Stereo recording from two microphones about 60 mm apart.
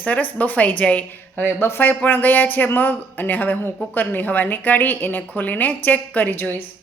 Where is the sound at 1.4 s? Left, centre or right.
Left.